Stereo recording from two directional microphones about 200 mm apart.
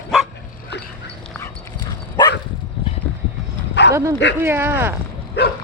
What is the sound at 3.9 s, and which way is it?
Dog, 15° right (ahead or behind).